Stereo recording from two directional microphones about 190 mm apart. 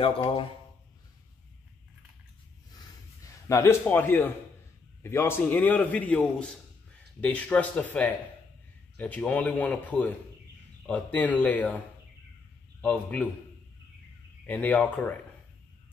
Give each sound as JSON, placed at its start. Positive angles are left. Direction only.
{"t": 0.0, "sound": "speech", "side_deg": 30}
{"t": 3.4, "sound": "a man's voice", "side_deg": 15}
{"t": 12.8, "sound": "a man's voice", "side_deg": 5}
{"t": 14.4, "sound": "a man's voice", "side_deg": 10}